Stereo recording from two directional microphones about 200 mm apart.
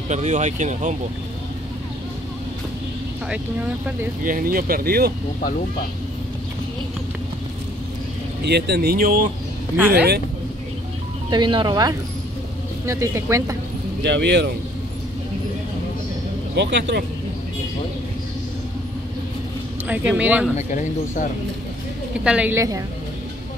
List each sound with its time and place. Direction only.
0.1 s speech: 35° right (ahead or behind)
4.2 s speech: 45° right (ahead or behind)
8.5 s speech: 55° right (ahead or behind)
9.8 s speech: 10° right (ahead or behind)
11.2 s speech: 25° right (ahead or behind)
14.0 s speech: 60° right (ahead or behind)
16.5 s speech: 60° right (ahead or behind)
19.9 s speech: 5° right (ahead or behind)
20.5 s a man's voice: 40° left (ahead or behind)
22.2 s speech: 5° right (ahead or behind)